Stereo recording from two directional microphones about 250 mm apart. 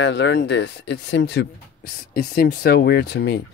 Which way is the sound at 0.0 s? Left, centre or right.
Left.